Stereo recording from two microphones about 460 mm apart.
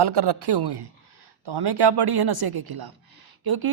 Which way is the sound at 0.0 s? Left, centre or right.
Right.